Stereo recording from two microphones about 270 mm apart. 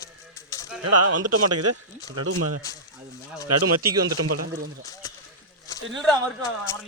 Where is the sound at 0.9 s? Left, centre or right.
Right.